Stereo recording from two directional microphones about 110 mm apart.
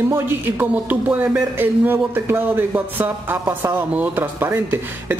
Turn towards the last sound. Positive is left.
turn(degrees=-20)  # may be behind; listen again after turning